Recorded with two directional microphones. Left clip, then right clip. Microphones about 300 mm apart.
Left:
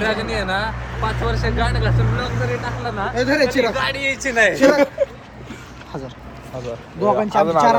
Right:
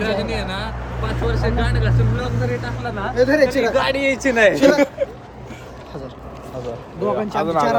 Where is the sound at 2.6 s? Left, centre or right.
Centre.